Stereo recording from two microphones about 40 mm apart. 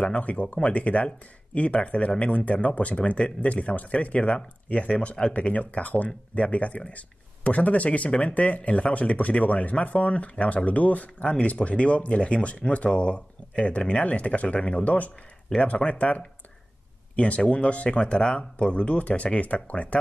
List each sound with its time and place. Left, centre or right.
0.0 s speech: left
5.5 s speech: left
14.9 s speech: left
15.6 s speech: left